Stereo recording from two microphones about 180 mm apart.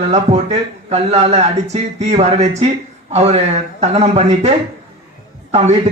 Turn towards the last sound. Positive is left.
turn(degrees=-40)  # may be behind; listen again after turning